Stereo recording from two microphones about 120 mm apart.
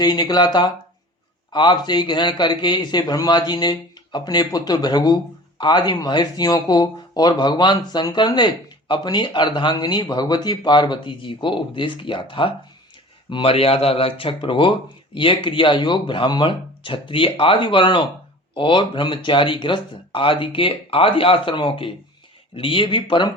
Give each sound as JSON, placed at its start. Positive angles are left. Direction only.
{"t": 0.0, "sound": "a man's voice", "side_deg": 35}